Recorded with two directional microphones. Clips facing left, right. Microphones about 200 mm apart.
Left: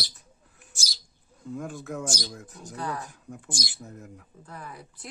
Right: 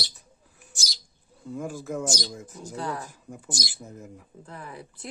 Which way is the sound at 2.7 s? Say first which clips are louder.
Right 1 dB; 30° right (ahead or behind).